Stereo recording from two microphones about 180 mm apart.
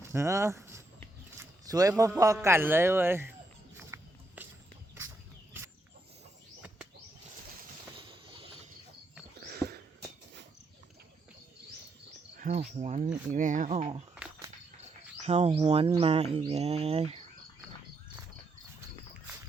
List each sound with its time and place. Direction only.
0.0 s a man's voice: 15° right (ahead or behind)
3.8 s horse: 10° right (ahead or behind)
8.3 s a sound: 30° right (ahead or behind)
9.4 s a sound: 60° right (ahead or behind)
12.4 s speech: 40° right (ahead or behind)
15.3 s speech: 35° right (ahead or behind)